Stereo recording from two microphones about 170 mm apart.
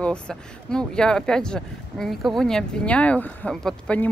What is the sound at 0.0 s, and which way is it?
Speech, 5° left (ahead or behind).